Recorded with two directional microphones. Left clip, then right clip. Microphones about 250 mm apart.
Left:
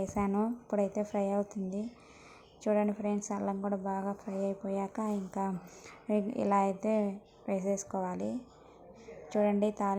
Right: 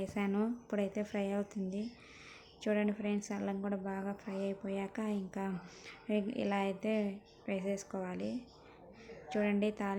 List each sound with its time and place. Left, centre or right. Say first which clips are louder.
0.0 s a woman's voice: left 4 dB; centre
7.9 s a woman's voice: left 6 dB; centre
9.3 s speech: left 5 dB; centre